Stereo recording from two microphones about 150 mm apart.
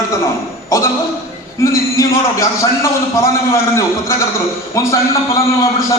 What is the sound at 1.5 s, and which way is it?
A man's voice, 20° left (ahead or behind).